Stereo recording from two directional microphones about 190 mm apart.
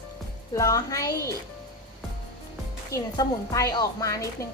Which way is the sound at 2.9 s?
20° left (ahead or behind).